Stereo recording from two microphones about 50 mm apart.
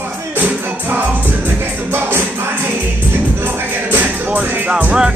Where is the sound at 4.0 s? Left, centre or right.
Right.